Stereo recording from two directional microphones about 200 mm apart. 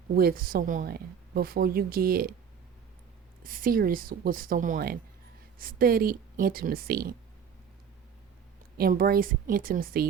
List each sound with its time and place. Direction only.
0.2 s a woman's voice: 45° right (ahead or behind)
3.4 s a woman's voice: 45° right (ahead or behind)
8.8 s a woman's voice: 45° right (ahead or behind)